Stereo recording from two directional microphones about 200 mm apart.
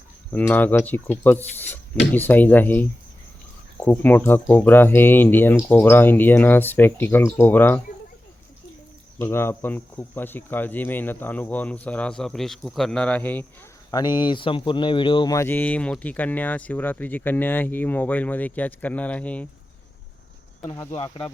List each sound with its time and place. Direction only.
0.3 s speech: 10° left (ahead or behind)
3.8 s speech: 10° left (ahead or behind)
9.1 s speech: 10° left (ahead or behind)
13.9 s speech: 20° left (ahead or behind)
20.7 s speech: 15° left (ahead or behind)